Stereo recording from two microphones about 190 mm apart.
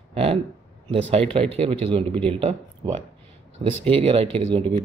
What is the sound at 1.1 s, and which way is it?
Speech, 30° right (ahead or behind).